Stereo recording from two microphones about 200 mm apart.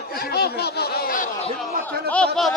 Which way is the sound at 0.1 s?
50° left (ahead or behind).